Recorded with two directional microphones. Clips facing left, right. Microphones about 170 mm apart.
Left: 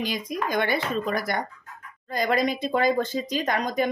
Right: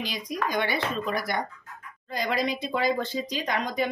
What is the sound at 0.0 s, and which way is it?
Speech, 50° left (ahead or behind).